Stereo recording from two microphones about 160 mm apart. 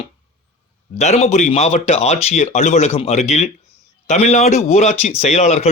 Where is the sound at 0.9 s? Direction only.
45° left (ahead or behind).